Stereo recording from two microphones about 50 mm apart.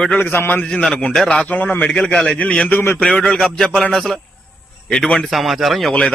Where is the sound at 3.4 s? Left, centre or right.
Centre.